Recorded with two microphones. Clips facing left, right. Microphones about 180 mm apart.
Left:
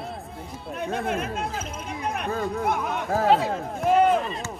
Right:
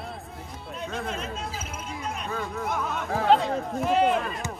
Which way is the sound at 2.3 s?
45° left (ahead or behind).